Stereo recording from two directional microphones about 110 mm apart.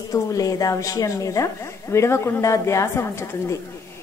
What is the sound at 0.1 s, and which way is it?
A woman's voice, 30° left (ahead or behind).